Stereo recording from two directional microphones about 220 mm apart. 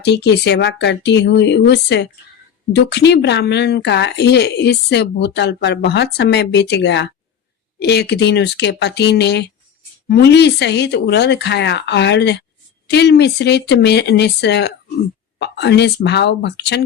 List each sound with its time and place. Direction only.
0.0 s speech: 50° left (ahead or behind)